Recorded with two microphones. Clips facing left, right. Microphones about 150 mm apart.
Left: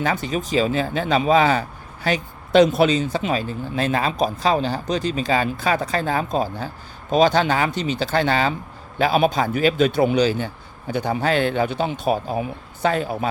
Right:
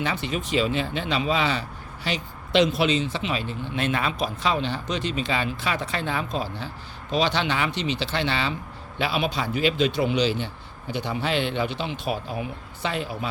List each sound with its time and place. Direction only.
0.0 s a man's voice: 40° left (ahead or behind)